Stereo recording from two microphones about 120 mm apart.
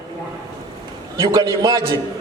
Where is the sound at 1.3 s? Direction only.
35° right (ahead or behind).